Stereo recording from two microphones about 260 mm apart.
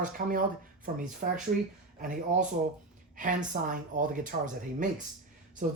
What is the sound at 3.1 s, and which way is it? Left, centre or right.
Speech, right.